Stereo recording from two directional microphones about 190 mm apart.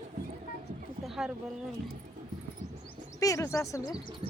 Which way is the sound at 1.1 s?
Centre (ahead or behind).